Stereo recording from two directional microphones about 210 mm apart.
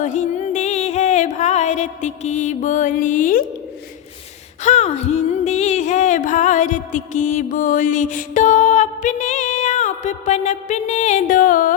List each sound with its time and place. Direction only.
0.0 s music: 35° left (ahead or behind)
4.6 s music: 30° left (ahead or behind)